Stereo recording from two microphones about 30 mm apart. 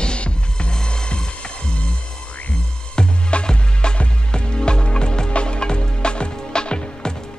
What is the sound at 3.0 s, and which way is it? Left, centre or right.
Music, left.